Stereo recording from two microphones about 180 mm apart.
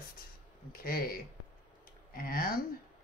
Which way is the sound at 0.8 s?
55° left (ahead or behind).